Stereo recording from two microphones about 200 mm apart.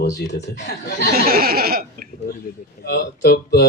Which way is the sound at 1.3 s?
50° right (ahead or behind).